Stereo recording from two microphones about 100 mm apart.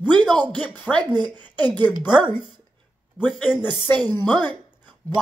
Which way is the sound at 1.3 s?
15° left (ahead or behind).